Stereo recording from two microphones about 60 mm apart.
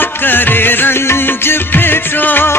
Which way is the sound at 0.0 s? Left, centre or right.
Left.